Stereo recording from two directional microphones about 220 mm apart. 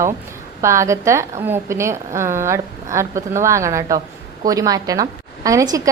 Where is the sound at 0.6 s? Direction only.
15° right (ahead or behind).